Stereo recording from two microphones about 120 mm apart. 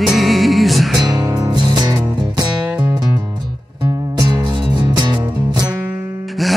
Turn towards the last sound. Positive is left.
turn(degrees=-35)  # may be behind; listen again after turning